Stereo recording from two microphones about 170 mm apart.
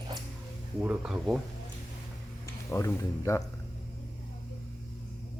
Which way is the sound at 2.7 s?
15° left (ahead or behind).